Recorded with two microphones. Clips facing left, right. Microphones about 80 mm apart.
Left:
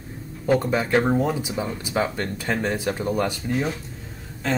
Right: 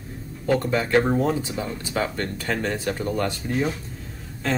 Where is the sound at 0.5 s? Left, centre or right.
Centre.